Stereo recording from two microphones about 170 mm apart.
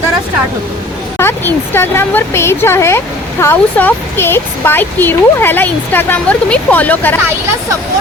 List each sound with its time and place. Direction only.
1.2 s speech: 15° left (ahead or behind)